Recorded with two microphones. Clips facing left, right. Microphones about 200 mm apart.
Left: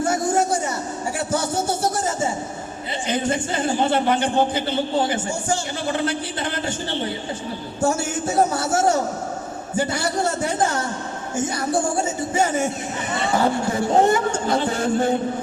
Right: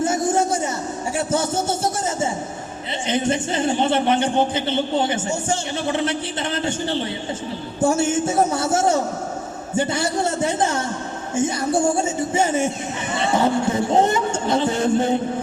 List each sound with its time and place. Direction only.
0.0 s a sound: 25° right (ahead or behind)
3.1 s a man's voice: 25° right (ahead or behind)
7.9 s a man's voice: 25° right (ahead or behind)